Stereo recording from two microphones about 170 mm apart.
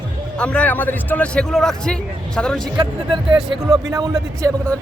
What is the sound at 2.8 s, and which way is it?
Speech, 30° right (ahead or behind).